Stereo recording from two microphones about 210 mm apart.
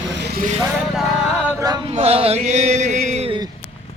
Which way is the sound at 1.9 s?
30° right (ahead or behind).